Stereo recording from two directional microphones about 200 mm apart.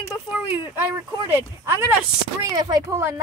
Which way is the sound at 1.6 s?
15° right (ahead or behind).